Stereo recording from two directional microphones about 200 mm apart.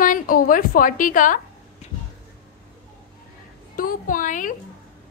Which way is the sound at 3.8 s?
45° left (ahead or behind).